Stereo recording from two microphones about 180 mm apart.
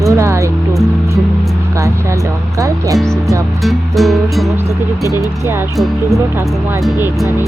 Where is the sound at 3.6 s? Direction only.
Centre (ahead or behind).